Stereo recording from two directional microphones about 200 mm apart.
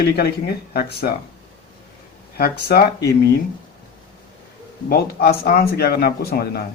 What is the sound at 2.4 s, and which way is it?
Speech, 50° left (ahead or behind).